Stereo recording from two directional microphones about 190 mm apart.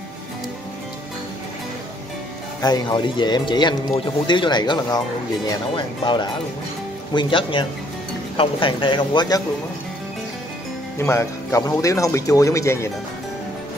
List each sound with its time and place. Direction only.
2.6 s speech: 20° left (ahead or behind)
11.0 s speech: 15° left (ahead or behind)